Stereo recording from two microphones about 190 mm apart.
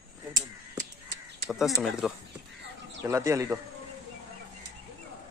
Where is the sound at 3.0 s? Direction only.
15° right (ahead or behind).